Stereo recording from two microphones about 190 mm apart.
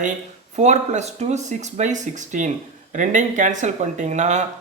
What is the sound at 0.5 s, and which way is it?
Speech, 35° right (ahead or behind).